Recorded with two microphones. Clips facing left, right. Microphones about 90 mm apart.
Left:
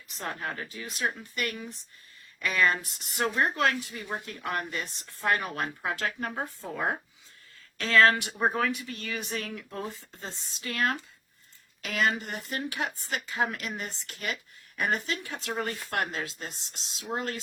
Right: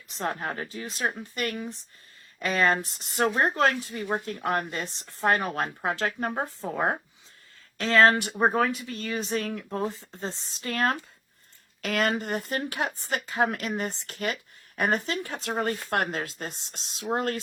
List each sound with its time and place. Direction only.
0.1 s a woman's voice: 30° right (ahead or behind)
6.4 s a woman's voice: 20° right (ahead or behind); by 9.7 s 40° right (ahead or behind)
9.7 s speech: 25° right (ahead or behind)
11.8 s speech: 50° right (ahead or behind)